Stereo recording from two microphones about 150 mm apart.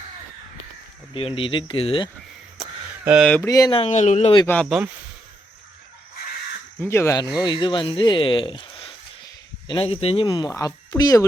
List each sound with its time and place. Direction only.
1.4 s speech: 35° left (ahead or behind)
3.0 s speech: 10° right (ahead or behind)
3.4 s speech: 20° left (ahead or behind)
3.8 s speech: 50° left (ahead or behind)
4.4 s speech: 10° left (ahead or behind)
6.8 s speech: 20° left (ahead or behind)